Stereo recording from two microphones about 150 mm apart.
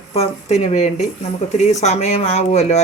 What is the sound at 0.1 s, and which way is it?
Speech, 45° left (ahead or behind).